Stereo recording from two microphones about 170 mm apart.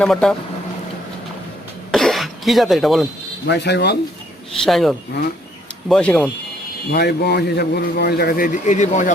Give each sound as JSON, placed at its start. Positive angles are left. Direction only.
{"t": 0.0, "sound": "speech", "side_deg": 5}
{"t": 1.9, "sound": "cough", "side_deg": 0}
{"t": 3.4, "sound": "speech", "side_deg": 85}
{"t": 4.5, "sound": "speech", "side_deg": 0}
{"t": 6.9, "sound": "a man's voice", "side_deg": 70}